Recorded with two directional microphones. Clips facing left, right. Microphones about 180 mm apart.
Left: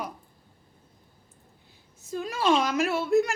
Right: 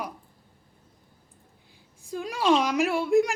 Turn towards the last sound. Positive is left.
turn(degrees=-15)  # may be behind; listen again after turning